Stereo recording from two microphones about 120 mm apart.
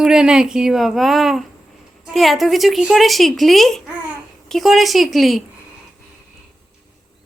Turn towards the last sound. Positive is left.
turn(degrees=0)  # may be behind; listen again after turning